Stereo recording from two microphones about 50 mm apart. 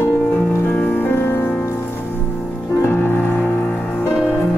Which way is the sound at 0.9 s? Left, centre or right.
Left.